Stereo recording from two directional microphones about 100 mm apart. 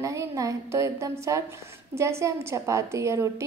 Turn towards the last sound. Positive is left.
turn(degrees=-30)  # may be behind; listen again after turning